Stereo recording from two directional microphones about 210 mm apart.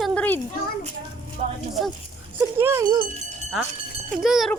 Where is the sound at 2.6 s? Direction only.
10° right (ahead or behind).